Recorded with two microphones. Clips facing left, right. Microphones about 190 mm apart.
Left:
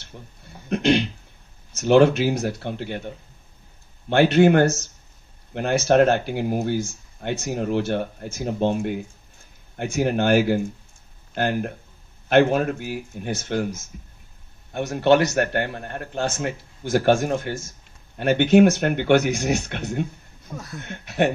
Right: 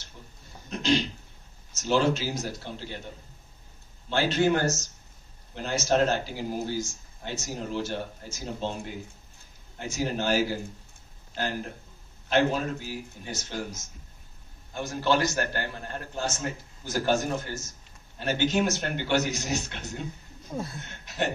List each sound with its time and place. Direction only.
0.0 s a sound: 60° left (ahead or behind)
1.8 s speech: 60° left (ahead or behind)
4.1 s speech: 60° left (ahead or behind)
9.8 s speech: 60° left (ahead or behind)